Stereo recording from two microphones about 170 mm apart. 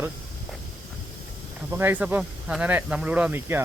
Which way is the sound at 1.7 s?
10° right (ahead or behind).